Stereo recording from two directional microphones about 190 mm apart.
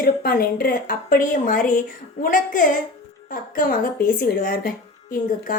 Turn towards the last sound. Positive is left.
turn(degrees=45)  # may be behind; listen again after turning